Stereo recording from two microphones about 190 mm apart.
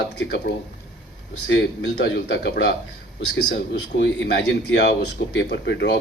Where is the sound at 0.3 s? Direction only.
60° left (ahead or behind).